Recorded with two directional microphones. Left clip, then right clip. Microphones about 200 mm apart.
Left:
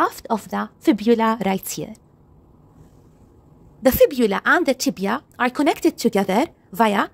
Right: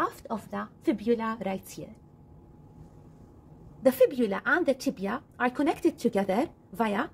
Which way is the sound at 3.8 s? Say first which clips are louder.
Left 7 dB; 50° left (ahead or behind).